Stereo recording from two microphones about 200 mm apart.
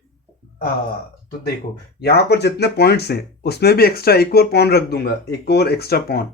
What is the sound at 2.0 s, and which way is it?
Speech, 55° left (ahead or behind).